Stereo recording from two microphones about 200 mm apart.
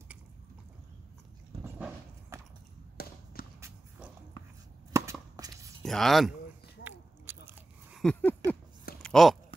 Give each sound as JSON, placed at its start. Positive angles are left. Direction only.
{"t": 1.6, "sound": "horse", "side_deg": -10}
{"t": 3.0, "sound": "basketball bounce", "side_deg": 50}
{"t": 3.4, "sound": "walk", "side_deg": 45}
{"t": 4.9, "sound": "a sound", "side_deg": -15}
{"t": 5.3, "sound": "whispering", "side_deg": -20}
{"t": 5.8, "sound": "speech", "side_deg": 0}
{"t": 6.8, "sound": "biting", "side_deg": -10}
{"t": 8.0, "sound": "a sound", "side_deg": 5}